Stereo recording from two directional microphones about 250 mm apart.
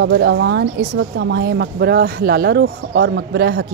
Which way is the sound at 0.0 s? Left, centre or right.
Right.